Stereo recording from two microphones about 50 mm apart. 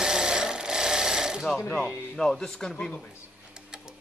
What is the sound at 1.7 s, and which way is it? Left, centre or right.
Speech, centre.